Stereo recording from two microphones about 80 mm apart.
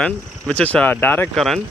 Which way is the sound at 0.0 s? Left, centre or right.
Centre.